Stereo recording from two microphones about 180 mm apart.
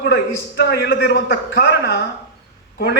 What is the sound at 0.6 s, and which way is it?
A man's voice, 65° left (ahead or behind).